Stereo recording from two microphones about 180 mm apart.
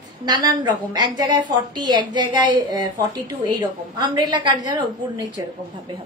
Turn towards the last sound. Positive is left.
turn(degrees=-25)  # may be behind; listen again after turning